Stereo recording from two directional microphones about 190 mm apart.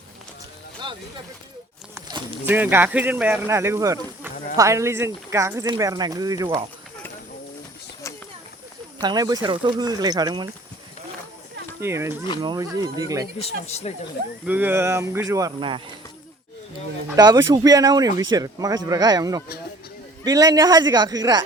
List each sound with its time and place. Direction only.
2.0 s a sound: 20° right (ahead or behind)
2.5 s speech: 10° right (ahead or behind)
9.0 s speech: 20° right (ahead or behind)
11.8 s speech: 15° right (ahead or behind)
13.4 s speech: 35° left (ahead or behind)
14.4 s speech: 10° right (ahead or behind)
17.2 s speech: 20° right (ahead or behind)